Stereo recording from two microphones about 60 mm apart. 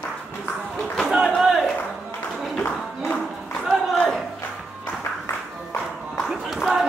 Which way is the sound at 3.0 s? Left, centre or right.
Left.